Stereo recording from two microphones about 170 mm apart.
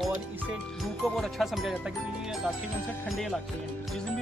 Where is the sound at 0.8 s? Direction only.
Centre (ahead or behind).